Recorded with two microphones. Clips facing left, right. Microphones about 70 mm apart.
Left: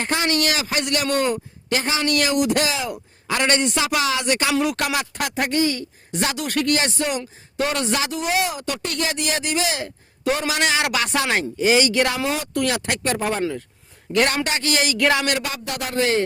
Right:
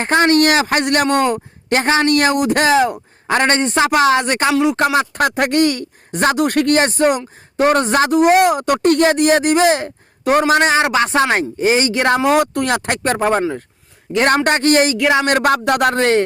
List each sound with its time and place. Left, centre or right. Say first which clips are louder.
0.0 s a man's voice: right 9 dB; right
12.1 s a man's voice: right 10 dB; right